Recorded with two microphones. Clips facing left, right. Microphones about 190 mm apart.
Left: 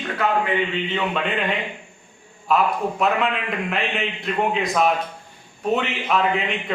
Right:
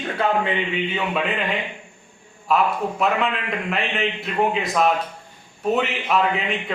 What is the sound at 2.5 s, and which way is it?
A man's voice, centre (ahead or behind).